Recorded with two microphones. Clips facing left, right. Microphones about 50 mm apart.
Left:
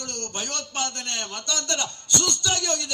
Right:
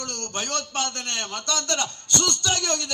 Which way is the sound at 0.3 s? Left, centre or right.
Right.